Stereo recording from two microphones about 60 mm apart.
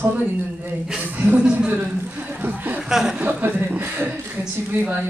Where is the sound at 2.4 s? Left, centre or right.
Right.